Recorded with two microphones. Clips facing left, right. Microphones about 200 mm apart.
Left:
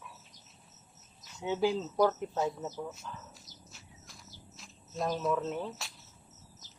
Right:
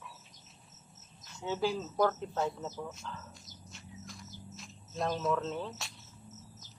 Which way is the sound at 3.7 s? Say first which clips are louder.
Right 7 dB; centre (ahead or behind).